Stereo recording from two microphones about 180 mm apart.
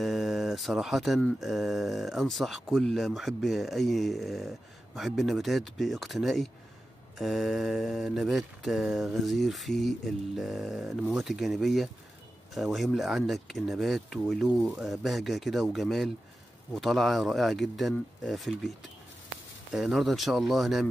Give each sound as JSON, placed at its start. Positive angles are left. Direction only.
{"t": 0.0, "sound": "speech", "side_deg": 0}
{"t": 19.7, "sound": "speech", "side_deg": 0}